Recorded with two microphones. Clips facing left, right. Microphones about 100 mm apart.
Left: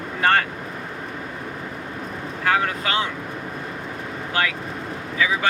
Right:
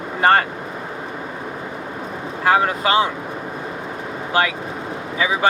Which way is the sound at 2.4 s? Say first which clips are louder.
Right 5 dB; 25° right (ahead or behind).